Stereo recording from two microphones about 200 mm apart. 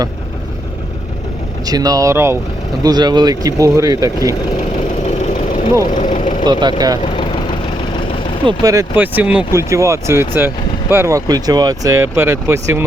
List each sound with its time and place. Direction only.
1.6 s speech: 20° right (ahead or behind)
5.9 s speech: 40° left (ahead or behind)
6.4 s speech: 20° right (ahead or behind)
7.0 s vehicle: 25° left (ahead or behind)
8.4 s speech: 15° right (ahead or behind)